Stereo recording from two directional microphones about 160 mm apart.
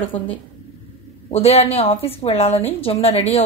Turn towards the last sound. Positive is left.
turn(degrees=40)  # may be behind; listen again after turning